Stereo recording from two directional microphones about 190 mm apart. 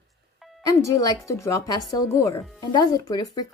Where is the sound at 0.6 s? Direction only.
15° left (ahead or behind).